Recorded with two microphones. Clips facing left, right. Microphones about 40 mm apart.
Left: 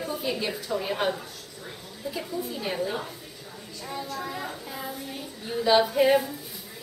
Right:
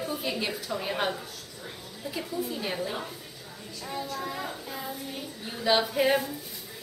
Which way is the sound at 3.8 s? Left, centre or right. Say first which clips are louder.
Even; centre.